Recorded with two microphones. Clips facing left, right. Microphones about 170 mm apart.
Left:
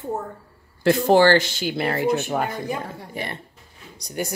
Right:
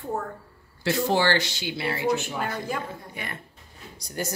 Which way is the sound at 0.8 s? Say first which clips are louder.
Left 7 dB; 50° left (ahead or behind).